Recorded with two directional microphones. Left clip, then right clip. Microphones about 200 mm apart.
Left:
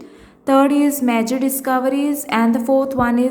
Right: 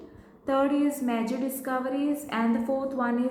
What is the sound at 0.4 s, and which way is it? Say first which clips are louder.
A woman's voice: left 10 dB; 40° left (ahead or behind).